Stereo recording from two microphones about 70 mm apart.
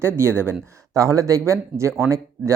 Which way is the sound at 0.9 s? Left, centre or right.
Right.